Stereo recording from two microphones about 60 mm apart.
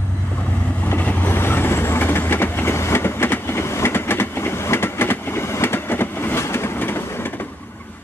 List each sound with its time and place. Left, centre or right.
1.0 s vehicle: left
6.4 s train: left